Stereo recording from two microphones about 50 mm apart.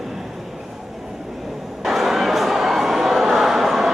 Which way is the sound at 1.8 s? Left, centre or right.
Centre.